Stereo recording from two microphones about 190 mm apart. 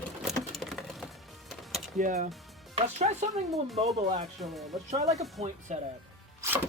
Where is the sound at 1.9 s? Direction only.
40° right (ahead or behind).